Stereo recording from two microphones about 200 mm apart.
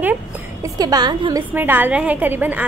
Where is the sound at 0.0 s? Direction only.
10° right (ahead or behind).